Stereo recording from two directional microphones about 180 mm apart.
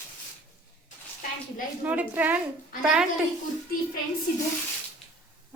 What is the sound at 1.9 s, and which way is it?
Speech, 10° right (ahead or behind).